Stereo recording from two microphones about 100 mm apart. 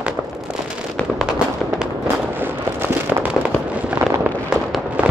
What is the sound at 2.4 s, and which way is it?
Fireworks, 20° right (ahead or behind).